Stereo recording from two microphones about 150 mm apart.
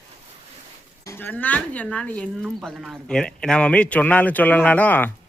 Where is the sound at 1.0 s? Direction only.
15° left (ahead or behind).